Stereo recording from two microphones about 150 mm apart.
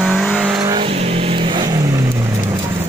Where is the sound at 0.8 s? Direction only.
40° right (ahead or behind).